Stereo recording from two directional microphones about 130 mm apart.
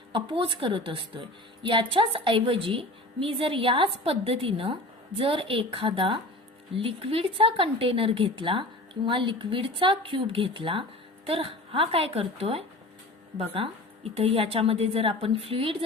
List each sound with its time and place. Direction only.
0.1 s a woman's voice: 40° right (ahead or behind)